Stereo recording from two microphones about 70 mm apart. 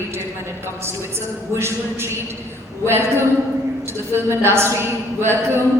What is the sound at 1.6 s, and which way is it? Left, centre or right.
A man's voice, right.